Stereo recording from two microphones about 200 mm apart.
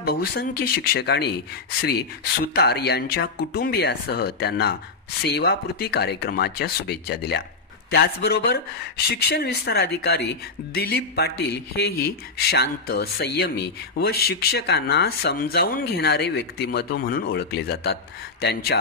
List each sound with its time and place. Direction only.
0.0 s speech: 50° left (ahead or behind)